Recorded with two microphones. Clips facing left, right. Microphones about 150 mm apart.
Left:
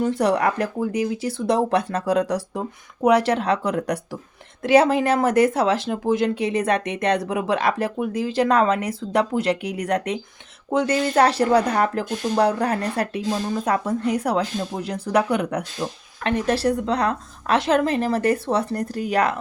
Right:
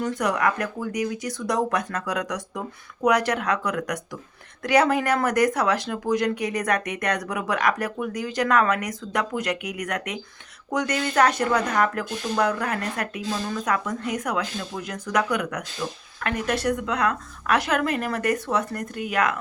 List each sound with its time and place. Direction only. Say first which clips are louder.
0.0 s speech: left 4 dB; 30° left (ahead or behind)